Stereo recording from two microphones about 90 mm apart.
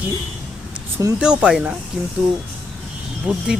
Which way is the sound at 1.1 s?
10° right (ahead or behind).